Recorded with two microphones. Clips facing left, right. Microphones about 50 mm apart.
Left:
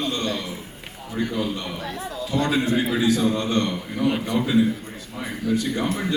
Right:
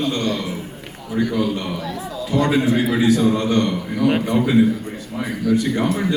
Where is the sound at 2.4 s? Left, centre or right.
Right.